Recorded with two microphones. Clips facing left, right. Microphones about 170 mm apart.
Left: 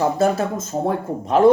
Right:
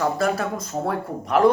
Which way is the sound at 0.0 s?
25° left (ahead or behind).